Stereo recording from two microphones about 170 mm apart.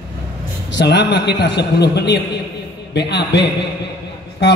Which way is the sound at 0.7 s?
90° left.